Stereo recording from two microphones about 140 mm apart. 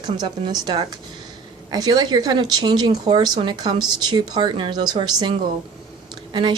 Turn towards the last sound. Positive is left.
turn(degrees=-30)  # may be behind; listen again after turning